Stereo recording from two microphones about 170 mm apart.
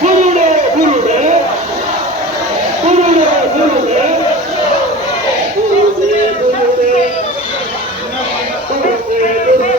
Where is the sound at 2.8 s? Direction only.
40° right (ahead or behind).